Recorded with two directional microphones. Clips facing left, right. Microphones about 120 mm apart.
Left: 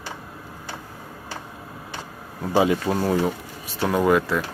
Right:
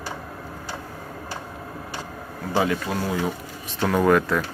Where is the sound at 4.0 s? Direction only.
5° left (ahead or behind).